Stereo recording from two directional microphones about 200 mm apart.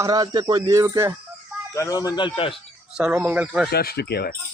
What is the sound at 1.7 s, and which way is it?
Speech, 15° left (ahead or behind).